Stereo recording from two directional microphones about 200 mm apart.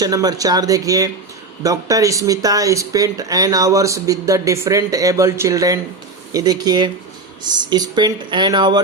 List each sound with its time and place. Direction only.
0.0 s speech: 20° right (ahead or behind)